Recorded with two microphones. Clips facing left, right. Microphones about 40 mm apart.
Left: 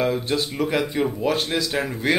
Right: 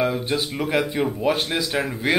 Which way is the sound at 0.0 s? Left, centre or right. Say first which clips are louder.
Even; centre.